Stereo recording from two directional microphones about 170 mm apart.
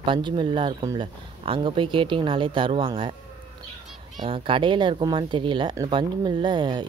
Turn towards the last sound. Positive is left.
turn(degrees=-25)  # may be behind; listen again after turning